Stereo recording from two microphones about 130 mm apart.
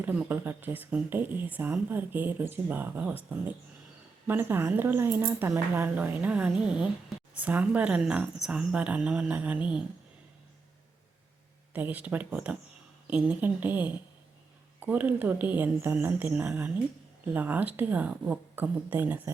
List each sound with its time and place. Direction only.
0.0 s speech: 15° right (ahead or behind)
4.3 s speech: 15° right (ahead or behind)
11.7 s speech: 10° right (ahead or behind)